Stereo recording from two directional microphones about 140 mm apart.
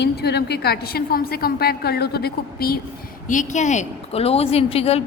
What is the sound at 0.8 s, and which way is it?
A woman's voice, 90° left.